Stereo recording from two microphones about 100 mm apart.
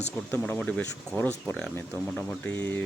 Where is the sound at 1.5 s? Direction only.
10° left (ahead or behind).